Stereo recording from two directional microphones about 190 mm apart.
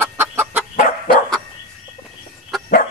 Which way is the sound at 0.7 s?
45° left (ahead or behind).